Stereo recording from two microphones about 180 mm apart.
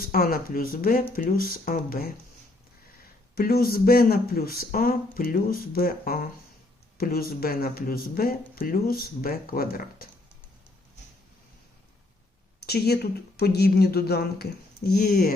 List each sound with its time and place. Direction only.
0.0 s speech: 55° left (ahead or behind)
3.3 s speech: 55° left (ahead or behind)
12.6 s speech: 60° left (ahead or behind)